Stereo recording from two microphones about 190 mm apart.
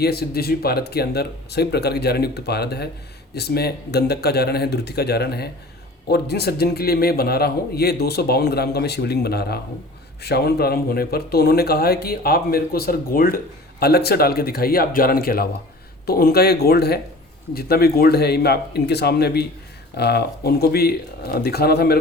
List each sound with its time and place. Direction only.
0.0 s a man's voice: 55° left (ahead or behind)